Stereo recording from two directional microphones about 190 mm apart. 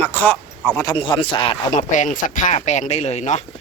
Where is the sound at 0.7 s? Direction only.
25° left (ahead or behind).